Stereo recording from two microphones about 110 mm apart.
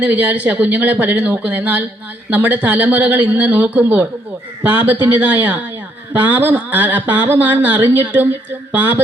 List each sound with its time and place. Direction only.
0.0 s speech: 15° right (ahead or behind)